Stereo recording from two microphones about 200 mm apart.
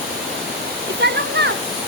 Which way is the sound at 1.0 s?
60° right (ahead or behind).